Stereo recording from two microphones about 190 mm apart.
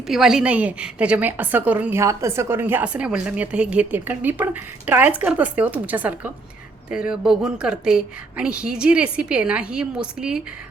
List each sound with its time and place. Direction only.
0.1 s a woman's voice: centre (ahead or behind)